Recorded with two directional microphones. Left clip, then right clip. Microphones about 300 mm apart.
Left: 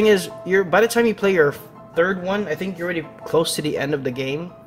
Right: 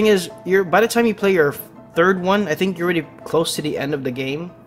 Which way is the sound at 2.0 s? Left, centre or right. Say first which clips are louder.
Right 4 dB; centre.